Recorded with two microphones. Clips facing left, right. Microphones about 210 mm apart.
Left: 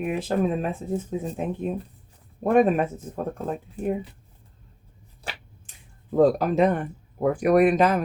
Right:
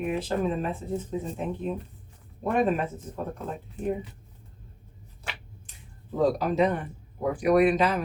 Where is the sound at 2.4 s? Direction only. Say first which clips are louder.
Left 6 dB; 50° left (ahead or behind).